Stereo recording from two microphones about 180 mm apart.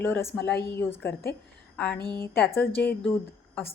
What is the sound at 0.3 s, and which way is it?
Speech, 10° left (ahead or behind).